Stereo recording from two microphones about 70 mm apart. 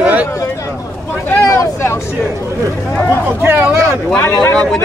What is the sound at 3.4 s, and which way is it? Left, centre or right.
Speech, right.